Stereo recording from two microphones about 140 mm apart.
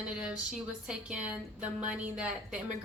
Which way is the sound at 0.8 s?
5° right (ahead or behind).